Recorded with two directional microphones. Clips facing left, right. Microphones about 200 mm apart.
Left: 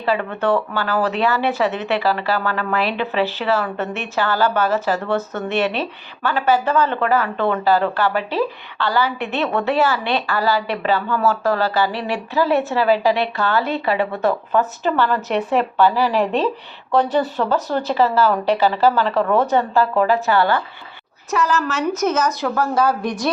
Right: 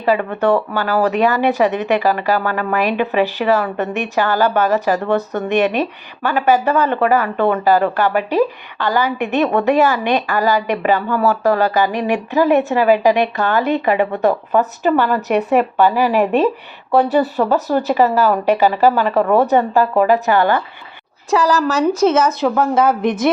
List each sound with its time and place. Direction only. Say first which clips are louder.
0.0 s a woman's voice: right 4 dB; 15° right (ahead or behind)
21.2 s speech: right 5 dB; 35° right (ahead or behind)